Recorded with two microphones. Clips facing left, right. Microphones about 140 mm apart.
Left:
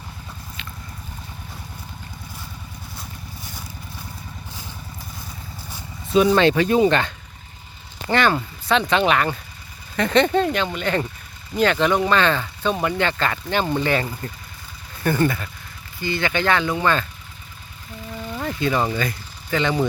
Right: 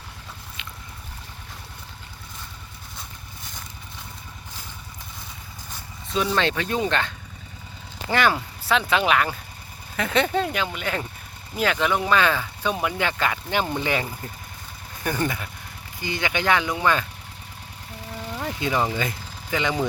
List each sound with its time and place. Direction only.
5.7 s speech: 10° left (ahead or behind)
8.1 s speech: 10° right (ahead or behind)
18.3 s vehicle: 15° right (ahead or behind)
18.9 s speech: 15° right (ahead or behind)